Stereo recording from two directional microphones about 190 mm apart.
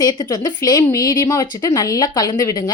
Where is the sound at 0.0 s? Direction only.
20° left (ahead or behind).